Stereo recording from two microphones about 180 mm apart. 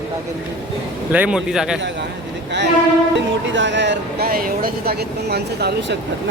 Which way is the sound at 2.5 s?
75° right (ahead or behind).